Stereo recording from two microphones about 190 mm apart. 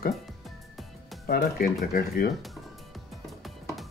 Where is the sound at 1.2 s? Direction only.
50° left (ahead or behind).